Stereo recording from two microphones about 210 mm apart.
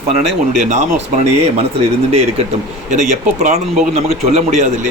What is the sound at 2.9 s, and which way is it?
Speech, 35° right (ahead or behind).